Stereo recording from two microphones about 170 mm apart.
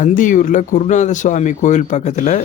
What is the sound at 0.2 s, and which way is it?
Speech, 50° left (ahead or behind).